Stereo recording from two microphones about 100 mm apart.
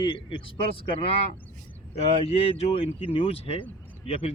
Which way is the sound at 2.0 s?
85° left.